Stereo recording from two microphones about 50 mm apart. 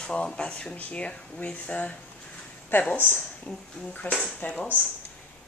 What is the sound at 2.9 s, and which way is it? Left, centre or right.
Speech, left.